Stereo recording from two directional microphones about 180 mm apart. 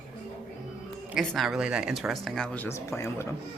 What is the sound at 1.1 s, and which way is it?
Speech, centre (ahead or behind).